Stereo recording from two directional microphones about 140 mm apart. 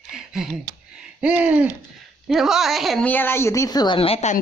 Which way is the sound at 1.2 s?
10° right (ahead or behind).